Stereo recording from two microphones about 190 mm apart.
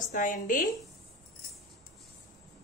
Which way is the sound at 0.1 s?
45° left (ahead or behind).